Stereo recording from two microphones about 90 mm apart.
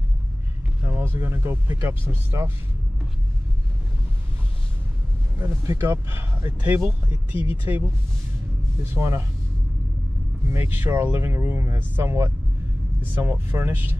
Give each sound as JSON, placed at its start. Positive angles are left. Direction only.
{"t": 0.8, "sound": "speech", "side_deg": -25}
{"t": 5.4, "sound": "speech", "side_deg": -30}
{"t": 10.5, "sound": "speech", "side_deg": -25}